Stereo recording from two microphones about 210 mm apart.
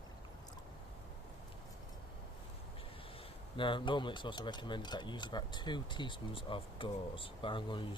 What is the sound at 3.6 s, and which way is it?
Speech, 25° left (ahead or behind).